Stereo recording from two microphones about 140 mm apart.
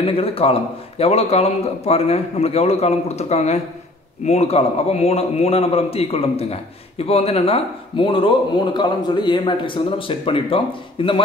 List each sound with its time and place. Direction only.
0.0 s a man's voice: 40° left (ahead or behind)